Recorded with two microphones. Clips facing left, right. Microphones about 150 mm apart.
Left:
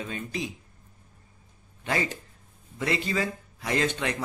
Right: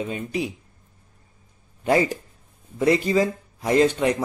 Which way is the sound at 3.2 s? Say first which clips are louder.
Right 8 dB; 35° right (ahead or behind).